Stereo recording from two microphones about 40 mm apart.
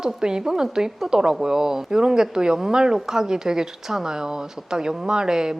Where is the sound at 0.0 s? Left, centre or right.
Centre.